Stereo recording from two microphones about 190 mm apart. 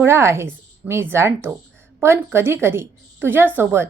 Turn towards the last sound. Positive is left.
turn(degrees=-10)  # may be behind; listen again after turning